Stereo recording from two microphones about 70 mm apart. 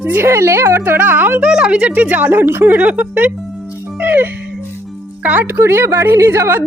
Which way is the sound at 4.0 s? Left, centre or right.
Right.